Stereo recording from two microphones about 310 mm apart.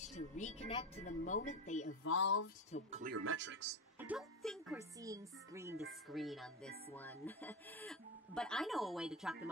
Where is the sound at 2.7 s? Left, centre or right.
Left.